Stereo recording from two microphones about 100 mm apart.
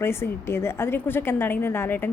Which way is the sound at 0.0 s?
25° left (ahead or behind).